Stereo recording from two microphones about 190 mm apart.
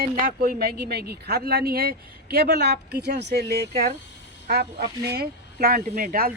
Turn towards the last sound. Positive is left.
turn(degrees=-50)  # may be behind; listen again after turning